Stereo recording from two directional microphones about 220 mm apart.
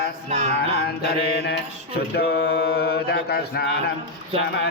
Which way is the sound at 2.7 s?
45° left (ahead or behind).